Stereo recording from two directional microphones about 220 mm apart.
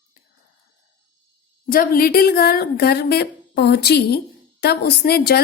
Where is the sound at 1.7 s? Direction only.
40° left (ahead or behind).